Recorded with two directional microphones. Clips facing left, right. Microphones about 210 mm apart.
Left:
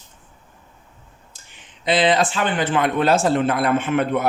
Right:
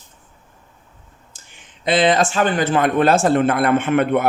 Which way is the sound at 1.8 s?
50° right (ahead or behind).